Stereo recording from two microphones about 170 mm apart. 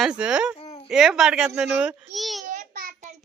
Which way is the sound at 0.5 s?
35° left (ahead or behind).